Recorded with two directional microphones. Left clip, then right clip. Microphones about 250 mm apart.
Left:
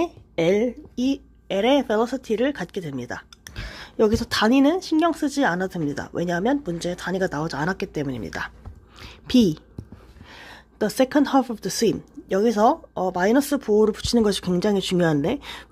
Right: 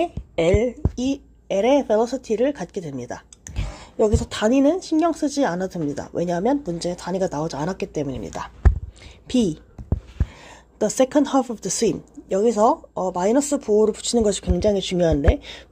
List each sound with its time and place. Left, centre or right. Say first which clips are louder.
0.0 s a woman's voice: right 2 dB; centre
9.0 s a sound: left 2 dB; centre
10.4 s a woman's voice: right 2 dB; centre